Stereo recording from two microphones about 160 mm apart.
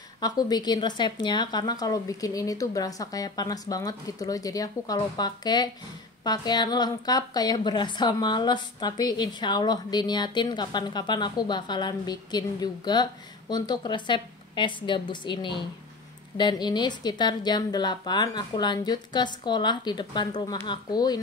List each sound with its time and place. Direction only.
0.2 s a woman's voice: 25° left (ahead or behind)